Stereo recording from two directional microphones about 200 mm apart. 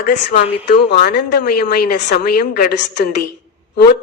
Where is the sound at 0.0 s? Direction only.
45° left (ahead or behind).